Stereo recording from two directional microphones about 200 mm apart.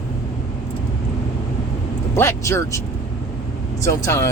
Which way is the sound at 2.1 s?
15° left (ahead or behind).